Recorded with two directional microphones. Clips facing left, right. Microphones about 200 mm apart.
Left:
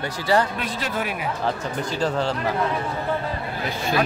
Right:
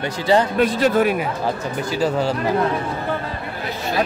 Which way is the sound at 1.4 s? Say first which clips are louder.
Right 3 dB; 10° right (ahead or behind).